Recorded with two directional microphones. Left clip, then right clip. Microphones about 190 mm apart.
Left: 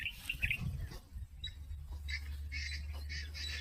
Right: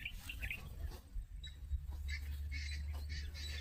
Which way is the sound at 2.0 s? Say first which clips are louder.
Left 6 dB; 70° right (ahead or behind).